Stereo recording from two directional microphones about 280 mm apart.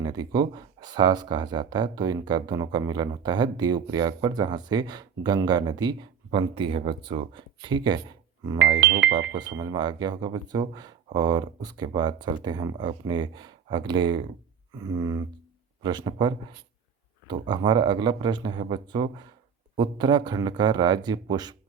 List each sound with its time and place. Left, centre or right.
0.0 s a sound: centre
0.3 s speech: centre
8.5 s speech: right
9.6 s speech: centre